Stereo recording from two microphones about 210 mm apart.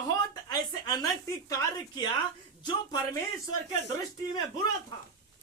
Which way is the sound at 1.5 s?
15° left (ahead or behind).